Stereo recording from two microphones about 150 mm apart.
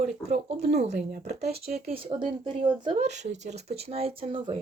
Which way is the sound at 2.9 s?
50° right (ahead or behind).